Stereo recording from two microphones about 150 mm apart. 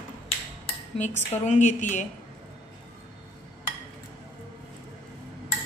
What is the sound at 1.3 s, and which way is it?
Speech, 50° left (ahead or behind).